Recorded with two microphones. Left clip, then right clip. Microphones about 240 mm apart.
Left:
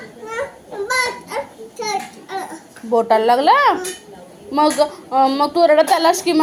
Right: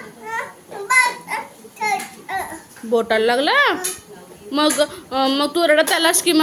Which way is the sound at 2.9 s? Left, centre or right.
Centre.